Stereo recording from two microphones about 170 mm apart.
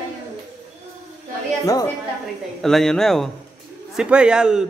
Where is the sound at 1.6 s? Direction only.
20° left (ahead or behind).